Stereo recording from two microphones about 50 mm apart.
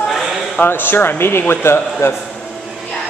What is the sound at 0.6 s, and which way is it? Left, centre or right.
Speech, left.